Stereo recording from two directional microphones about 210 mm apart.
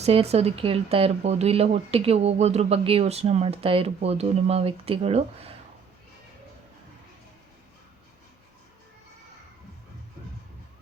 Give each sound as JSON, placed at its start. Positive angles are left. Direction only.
{"t": 0.0, "sound": "speech", "side_deg": -30}